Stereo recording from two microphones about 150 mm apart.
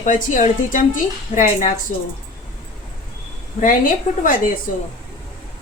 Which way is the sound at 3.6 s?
65° left (ahead or behind).